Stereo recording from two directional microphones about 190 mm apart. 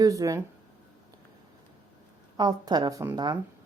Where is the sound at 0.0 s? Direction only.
20° right (ahead or behind).